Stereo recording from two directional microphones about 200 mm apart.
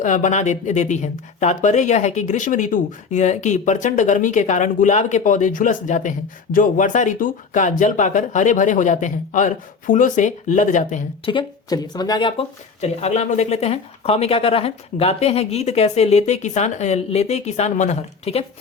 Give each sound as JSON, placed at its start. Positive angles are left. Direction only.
{"t": 0.0, "sound": "speech", "side_deg": 40}
{"t": 11.3, "sound": "speech", "side_deg": 20}